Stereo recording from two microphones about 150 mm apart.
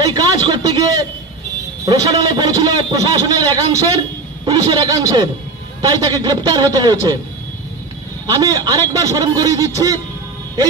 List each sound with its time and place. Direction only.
0.0 s a sound: 25° right (ahead or behind)
1.9 s a man's voice: 25° right (ahead or behind)
8.3 s a man's voice: 25° right (ahead or behind)